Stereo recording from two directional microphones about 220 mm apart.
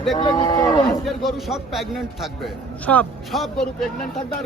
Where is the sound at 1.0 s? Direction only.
Centre (ahead or behind).